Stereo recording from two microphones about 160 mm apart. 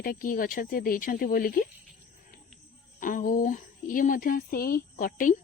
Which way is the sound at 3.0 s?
55° left (ahead or behind).